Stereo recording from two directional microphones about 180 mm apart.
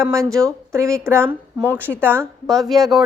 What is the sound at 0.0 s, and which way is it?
A child's voice, 15° right (ahead or behind).